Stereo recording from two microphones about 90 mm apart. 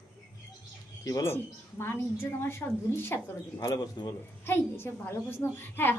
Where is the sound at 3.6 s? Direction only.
50° left (ahead or behind).